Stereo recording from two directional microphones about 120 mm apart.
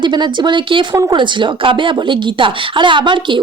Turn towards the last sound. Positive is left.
turn(degrees=-40)  # may be behind; listen again after turning